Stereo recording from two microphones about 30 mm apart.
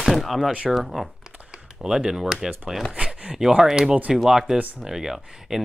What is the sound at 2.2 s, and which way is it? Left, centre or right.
Speech, centre.